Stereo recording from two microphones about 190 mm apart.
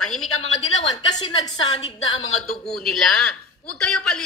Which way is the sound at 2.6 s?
Centre (ahead or behind).